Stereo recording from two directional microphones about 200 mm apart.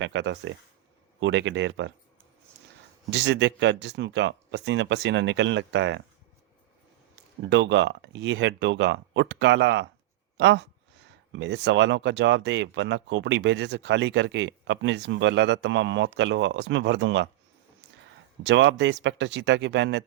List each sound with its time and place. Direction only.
0.0 s speech: 65° right (ahead or behind)
3.1 s speech: 60° right (ahead or behind)
7.5 s speech: 65° right (ahead or behind)
18.4 s speech: 65° right (ahead or behind)